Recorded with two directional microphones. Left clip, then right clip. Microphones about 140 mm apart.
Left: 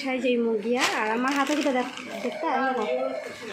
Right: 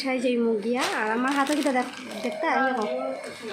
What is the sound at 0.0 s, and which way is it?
Speech, 15° right (ahead or behind).